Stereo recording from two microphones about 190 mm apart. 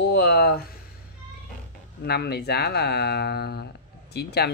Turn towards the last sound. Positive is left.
turn(degrees=60)  # may be behind; listen again after turning